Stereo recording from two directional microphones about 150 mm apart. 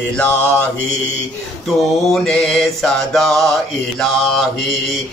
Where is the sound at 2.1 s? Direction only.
5° left (ahead or behind).